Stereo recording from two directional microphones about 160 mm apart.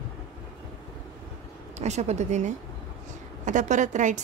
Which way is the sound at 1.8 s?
45° right (ahead or behind).